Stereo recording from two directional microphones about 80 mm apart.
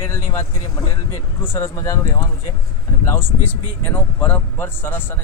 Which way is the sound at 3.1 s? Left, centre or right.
Left.